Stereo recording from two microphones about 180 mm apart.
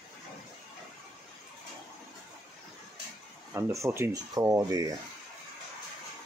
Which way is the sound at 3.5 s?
15° right (ahead or behind).